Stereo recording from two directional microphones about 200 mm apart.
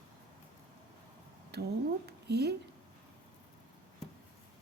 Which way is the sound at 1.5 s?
55° right (ahead or behind).